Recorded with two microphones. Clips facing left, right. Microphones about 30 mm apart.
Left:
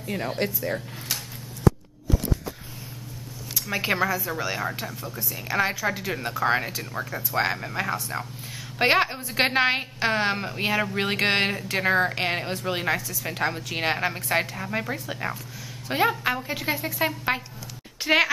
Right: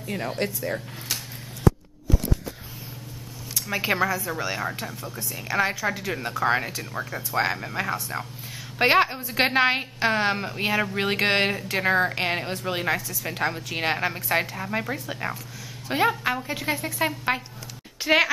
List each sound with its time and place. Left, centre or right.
0.0 s a woman's voice: centre
3.5 s a woman's voice: centre